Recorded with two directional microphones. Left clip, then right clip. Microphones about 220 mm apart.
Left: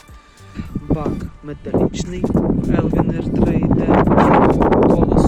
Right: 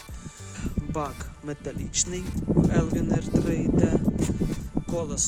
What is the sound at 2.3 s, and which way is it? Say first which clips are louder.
Speech: left 13 dB; 5° right (ahead or behind).